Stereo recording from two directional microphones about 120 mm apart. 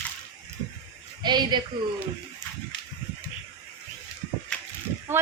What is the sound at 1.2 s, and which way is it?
Speech, 35° right (ahead or behind).